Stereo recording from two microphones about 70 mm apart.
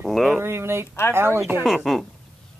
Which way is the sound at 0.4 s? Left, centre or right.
Right.